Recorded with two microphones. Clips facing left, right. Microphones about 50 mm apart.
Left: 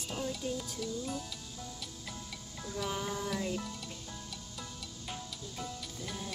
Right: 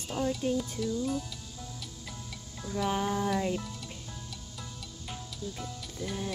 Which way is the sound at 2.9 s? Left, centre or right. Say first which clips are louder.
Right 8 dB; right.